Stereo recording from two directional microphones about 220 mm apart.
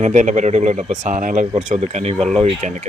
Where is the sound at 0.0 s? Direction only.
35° right (ahead or behind).